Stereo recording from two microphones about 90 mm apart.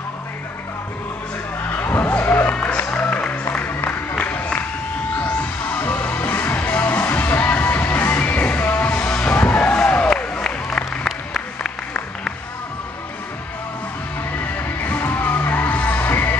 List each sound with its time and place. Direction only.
1.8 s music: 20° left (ahead or behind)
4.2 s crowd: 20° left (ahead or behind)
5.2 s music: 20° left (ahead or behind)
9.3 s a sound: 15° left (ahead or behind)
10.9 s applause: centre (ahead or behind)
14.6 s music: 20° left (ahead or behind)